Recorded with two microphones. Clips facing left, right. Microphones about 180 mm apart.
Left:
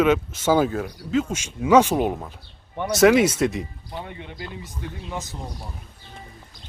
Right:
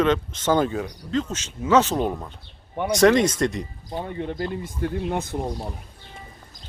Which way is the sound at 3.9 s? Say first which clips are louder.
Right 6 dB; 45° right (ahead or behind).